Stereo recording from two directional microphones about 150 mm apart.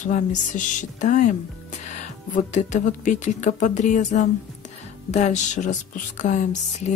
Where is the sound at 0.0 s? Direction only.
55° left (ahead or behind).